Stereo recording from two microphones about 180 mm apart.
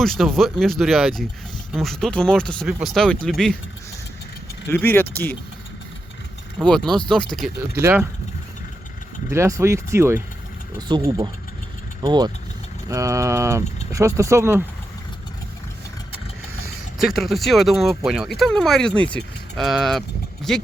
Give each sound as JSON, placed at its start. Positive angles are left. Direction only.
{"t": 0.0, "sound": "speech", "side_deg": 0}
{"t": 4.7, "sound": "speech", "side_deg": 10}
{"t": 6.6, "sound": "speech", "side_deg": 0}
{"t": 7.8, "sound": "speech", "side_deg": -15}
{"t": 9.3, "sound": "speech", "side_deg": -15}
{"t": 17.0, "sound": "speech", "side_deg": 0}